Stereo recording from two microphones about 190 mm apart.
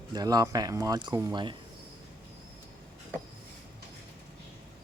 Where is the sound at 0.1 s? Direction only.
20° right (ahead or behind).